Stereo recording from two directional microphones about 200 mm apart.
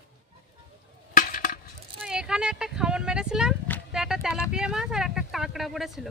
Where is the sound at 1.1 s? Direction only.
40° left (ahead or behind).